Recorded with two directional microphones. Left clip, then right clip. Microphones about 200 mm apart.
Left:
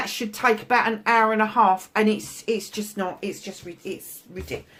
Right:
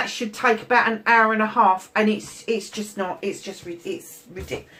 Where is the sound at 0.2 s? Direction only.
50° left (ahead or behind).